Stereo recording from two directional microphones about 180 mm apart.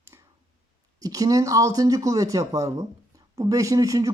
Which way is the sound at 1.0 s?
20° right (ahead or behind).